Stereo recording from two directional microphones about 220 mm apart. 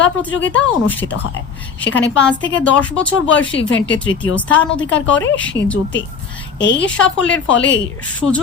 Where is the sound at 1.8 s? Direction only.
55° left (ahead or behind).